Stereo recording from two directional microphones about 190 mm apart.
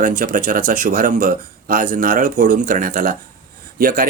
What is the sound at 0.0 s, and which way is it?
A man's voice, 45° right (ahead or behind).